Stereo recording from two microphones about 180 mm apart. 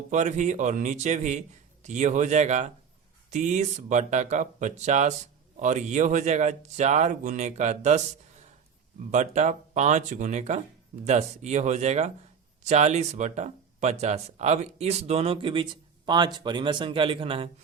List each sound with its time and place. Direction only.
0.1 s a man's voice: 40° right (ahead or behind)
9.1 s speech: 40° right (ahead or behind)